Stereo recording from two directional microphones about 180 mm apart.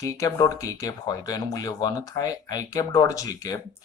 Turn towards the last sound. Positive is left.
turn(degrees=20)  # may be behind; listen again after turning